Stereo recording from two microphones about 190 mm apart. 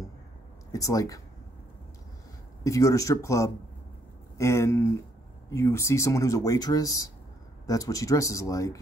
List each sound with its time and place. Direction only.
0.7 s speech: 15° left (ahead or behind)
2.6 s speech: 15° left (ahead or behind)